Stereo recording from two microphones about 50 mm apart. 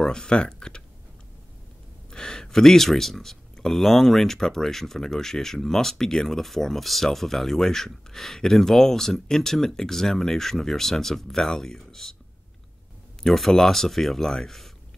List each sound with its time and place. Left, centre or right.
0.0 s speech: centre
2.0 s speech: centre
13.2 s speech: centre